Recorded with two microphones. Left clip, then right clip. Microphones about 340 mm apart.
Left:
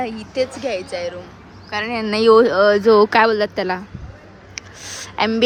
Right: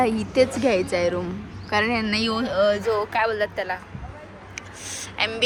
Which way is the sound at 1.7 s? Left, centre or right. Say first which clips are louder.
Left 1 dB; centre.